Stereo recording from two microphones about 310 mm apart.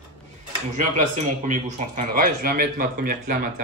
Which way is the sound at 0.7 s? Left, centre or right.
Right.